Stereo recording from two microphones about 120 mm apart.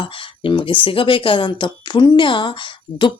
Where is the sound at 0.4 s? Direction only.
45° left (ahead or behind).